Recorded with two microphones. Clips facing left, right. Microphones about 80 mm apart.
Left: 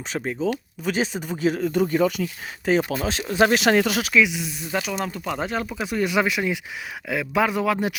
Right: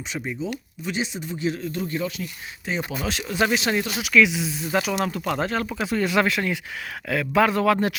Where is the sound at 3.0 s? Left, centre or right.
Left.